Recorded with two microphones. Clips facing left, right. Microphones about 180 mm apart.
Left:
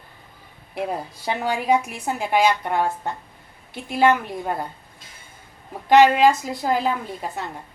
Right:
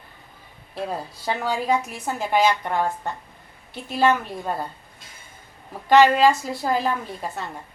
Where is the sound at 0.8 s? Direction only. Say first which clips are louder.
Left 2 dB; 15° left (ahead or behind).